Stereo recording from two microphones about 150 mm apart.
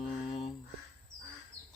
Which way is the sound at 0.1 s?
40° left (ahead or behind).